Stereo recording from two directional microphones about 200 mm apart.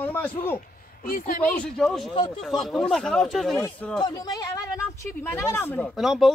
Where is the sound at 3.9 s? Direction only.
20° left (ahead or behind).